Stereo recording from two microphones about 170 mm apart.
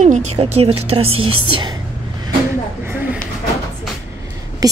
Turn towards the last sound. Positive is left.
turn(degrees=-20)  # may be behind; listen again after turning